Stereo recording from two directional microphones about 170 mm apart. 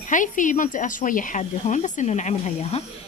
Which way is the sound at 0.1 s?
50° left (ahead or behind).